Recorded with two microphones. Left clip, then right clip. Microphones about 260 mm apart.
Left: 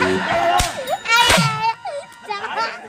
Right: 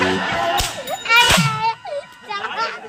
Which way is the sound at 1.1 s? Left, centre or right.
Left.